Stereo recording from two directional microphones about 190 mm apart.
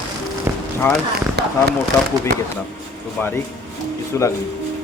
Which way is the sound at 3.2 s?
10° left (ahead or behind).